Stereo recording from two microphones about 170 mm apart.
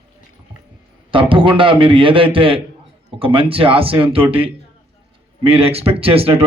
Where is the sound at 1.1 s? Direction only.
30° right (ahead or behind).